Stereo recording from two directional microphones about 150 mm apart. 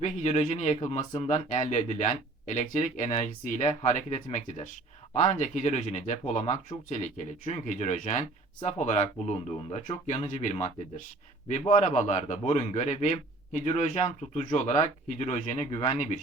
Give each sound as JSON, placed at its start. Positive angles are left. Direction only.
{"t": 0.0, "sound": "speech", "side_deg": 45}
{"t": 11.7, "sound": "speech", "side_deg": 55}